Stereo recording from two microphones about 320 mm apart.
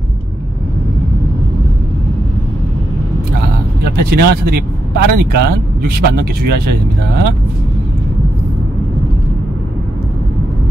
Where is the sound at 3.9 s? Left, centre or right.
Right.